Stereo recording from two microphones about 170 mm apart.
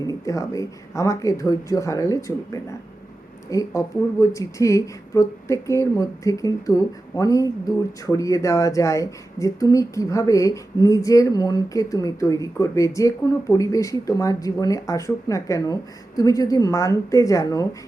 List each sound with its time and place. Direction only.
0.0 s speech: 20° left (ahead or behind)